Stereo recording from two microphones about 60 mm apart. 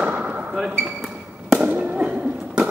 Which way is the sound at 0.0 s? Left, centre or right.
Right.